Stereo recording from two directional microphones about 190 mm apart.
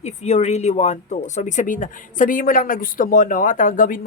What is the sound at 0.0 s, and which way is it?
Speech, 35° left (ahead or behind).